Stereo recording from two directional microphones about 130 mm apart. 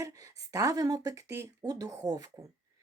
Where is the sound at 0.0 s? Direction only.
25° right (ahead or behind).